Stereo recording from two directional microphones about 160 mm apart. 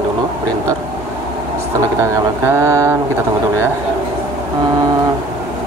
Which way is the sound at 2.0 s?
15° right (ahead or behind).